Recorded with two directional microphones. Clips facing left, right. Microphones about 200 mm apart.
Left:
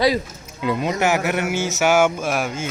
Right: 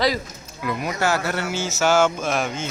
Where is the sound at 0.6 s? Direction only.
25° left (ahead or behind).